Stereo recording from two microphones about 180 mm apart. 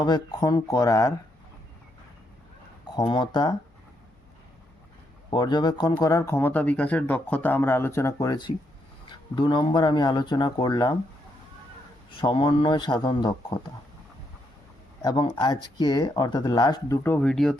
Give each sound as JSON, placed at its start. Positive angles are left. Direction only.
{"t": 0.0, "sound": "speech", "side_deg": 20}
{"t": 2.9, "sound": "speech", "side_deg": 25}
{"t": 5.3, "sound": "speech", "side_deg": 25}
{"t": 12.2, "sound": "speech", "side_deg": 25}
{"t": 15.0, "sound": "speech", "side_deg": 25}
{"t": 17.0, "sound": "speech", "side_deg": 10}